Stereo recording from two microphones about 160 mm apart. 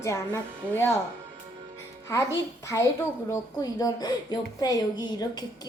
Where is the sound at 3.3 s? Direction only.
20° left (ahead or behind).